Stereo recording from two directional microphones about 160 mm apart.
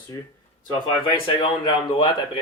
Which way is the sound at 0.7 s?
30° left (ahead or behind).